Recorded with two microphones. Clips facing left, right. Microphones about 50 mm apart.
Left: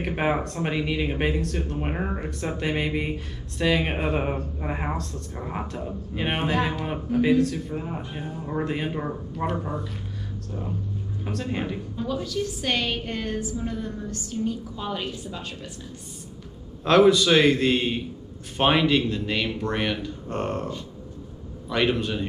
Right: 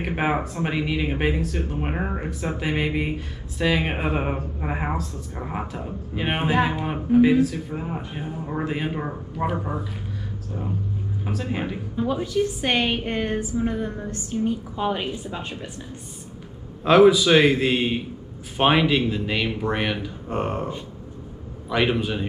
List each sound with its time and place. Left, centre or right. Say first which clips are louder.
0.0 s speech: right 1 dB; centre
11.2 s speech: right 1 dB; centre
12.0 s a woman's voice: right 5 dB; right
16.8 s speech: right 3 dB; centre